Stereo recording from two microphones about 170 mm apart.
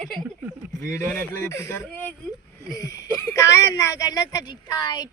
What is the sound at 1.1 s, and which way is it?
Speech, 15° left (ahead or behind).